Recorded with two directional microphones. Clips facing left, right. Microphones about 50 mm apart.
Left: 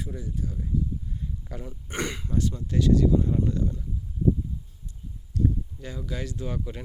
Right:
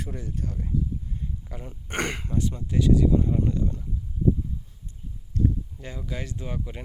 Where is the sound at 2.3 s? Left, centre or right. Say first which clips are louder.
Even; right.